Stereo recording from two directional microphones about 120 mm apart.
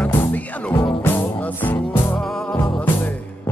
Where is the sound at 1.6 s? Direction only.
15° left (ahead or behind).